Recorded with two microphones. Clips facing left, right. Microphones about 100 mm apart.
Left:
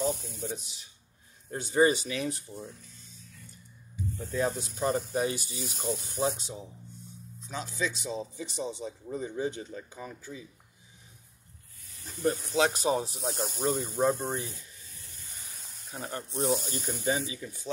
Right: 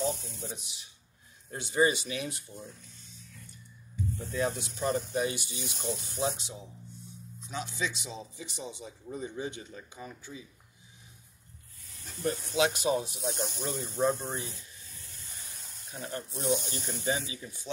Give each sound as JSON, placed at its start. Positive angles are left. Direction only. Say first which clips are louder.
{"t": 0.0, "sound": "a sound", "louder": "left 2 dB", "side_deg": 45}
{"t": 1.5, "sound": "a man's voice", "louder": "left 3 dB", "side_deg": 40}
{"t": 4.4, "sound": "a man's voice", "louder": "left 2 dB", "side_deg": 35}
{"t": 12.6, "sound": "a man's voice", "louder": "even", "side_deg": 35}
{"t": 13.2, "sound": "speech", "louder": "left 1 dB", "side_deg": 0}
{"t": 13.5, "sound": "speech", "louder": "left 6 dB", "side_deg": 45}
{"t": 14.4, "sound": "rub", "louder": "left 2 dB", "side_deg": -25}
{"t": 15.9, "sound": "speech", "louder": "left 1 dB", "side_deg": 45}
{"t": 16.3, "sound": "speech", "louder": "left 2 dB", "side_deg": 0}
{"t": 16.6, "sound": "speech", "louder": "left 2 dB", "side_deg": 45}